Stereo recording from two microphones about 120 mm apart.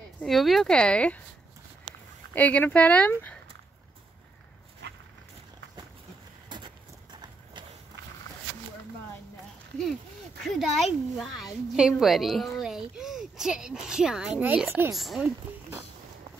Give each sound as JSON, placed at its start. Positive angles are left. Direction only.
{"t": 0.2, "sound": "speech", "side_deg": 0}
{"t": 2.3, "sound": "speech", "side_deg": 15}
{"t": 6.5, "sound": "clip-clop", "side_deg": -40}
{"t": 10.4, "sound": "speech", "side_deg": 0}
{"t": 15.0, "sound": "speech", "side_deg": 0}
{"t": 15.5, "sound": "speech", "side_deg": -15}